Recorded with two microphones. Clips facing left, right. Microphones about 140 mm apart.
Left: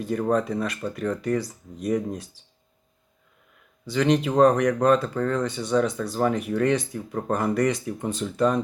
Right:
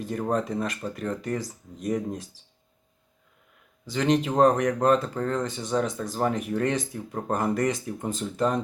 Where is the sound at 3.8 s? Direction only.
35° right (ahead or behind).